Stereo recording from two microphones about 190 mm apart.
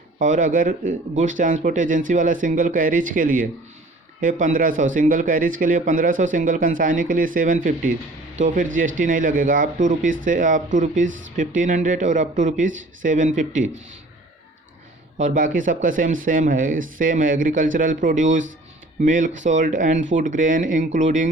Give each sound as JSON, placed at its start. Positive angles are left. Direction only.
{"t": 0.2, "sound": "speech", "side_deg": -40}
{"t": 15.2, "sound": "speech", "side_deg": -45}